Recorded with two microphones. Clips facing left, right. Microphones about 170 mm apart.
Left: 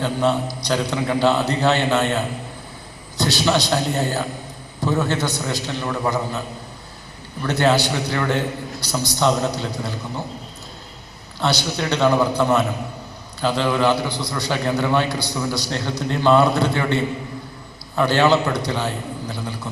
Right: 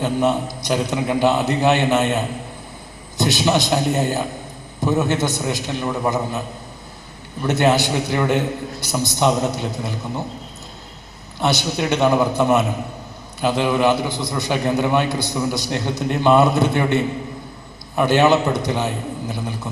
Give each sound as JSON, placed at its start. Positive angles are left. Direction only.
{"t": 0.0, "sound": "a man's voice", "side_deg": -20}
{"t": 7.4, "sound": "a man's voice", "side_deg": -20}
{"t": 11.3, "sound": "a man's voice", "side_deg": -20}